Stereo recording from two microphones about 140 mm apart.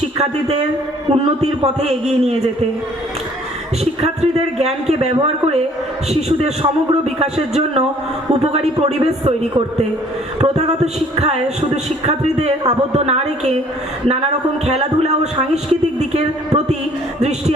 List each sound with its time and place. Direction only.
0.2 s speech: 50° right (ahead or behind)
4.0 s speech: 50° right (ahead or behind)
14.7 s speech: 50° right (ahead or behind)